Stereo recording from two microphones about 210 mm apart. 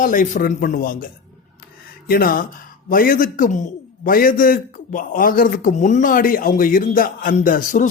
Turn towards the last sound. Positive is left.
turn(degrees=40)  # may be behind; listen again after turning